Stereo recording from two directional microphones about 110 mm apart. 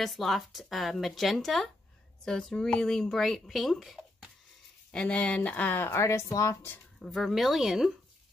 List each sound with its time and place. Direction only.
0.0 s speech: centre (ahead or behind); by 6.8 s 25° left (ahead or behind)
7.0 s speech: centre (ahead or behind)